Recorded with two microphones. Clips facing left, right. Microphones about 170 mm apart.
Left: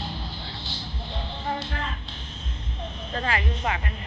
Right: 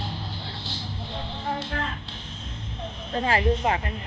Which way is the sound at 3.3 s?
35° right (ahead or behind).